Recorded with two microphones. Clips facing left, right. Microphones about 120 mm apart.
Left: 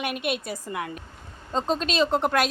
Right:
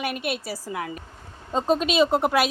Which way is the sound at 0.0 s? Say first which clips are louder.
Even; centre (ahead or behind).